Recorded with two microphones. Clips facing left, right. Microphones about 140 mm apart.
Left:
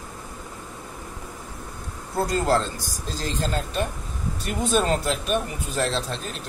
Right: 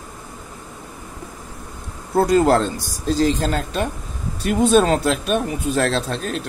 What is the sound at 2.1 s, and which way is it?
Speech, 60° right (ahead or behind).